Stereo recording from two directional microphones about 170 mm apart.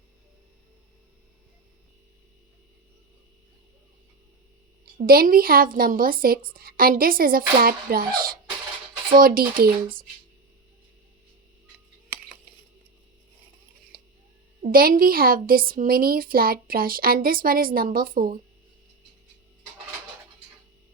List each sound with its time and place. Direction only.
4.9 s a woman's voice: 60° right (ahead or behind)
13.9 s a sound: 60° right (ahead or behind)
14.6 s a woman's voice: 60° right (ahead or behind)